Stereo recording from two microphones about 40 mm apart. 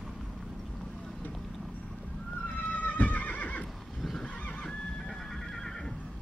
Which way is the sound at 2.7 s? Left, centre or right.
Left.